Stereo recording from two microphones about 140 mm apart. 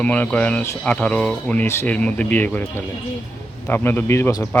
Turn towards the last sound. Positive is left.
turn(degrees=20)  # may be behind; listen again after turning